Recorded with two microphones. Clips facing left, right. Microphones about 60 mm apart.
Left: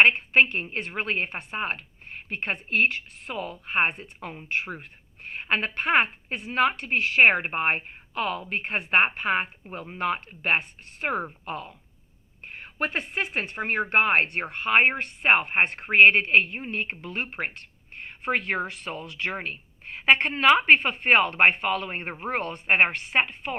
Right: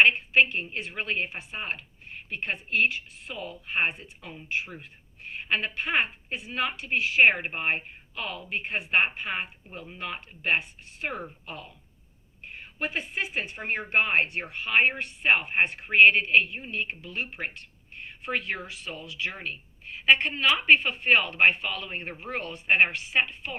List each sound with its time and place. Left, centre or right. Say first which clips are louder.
0.1 s a woman's voice: left 2 dB; left
7.3 s a woman's voice: left 3 dB; left
12.6 s a woman's voice: left 3 dB; left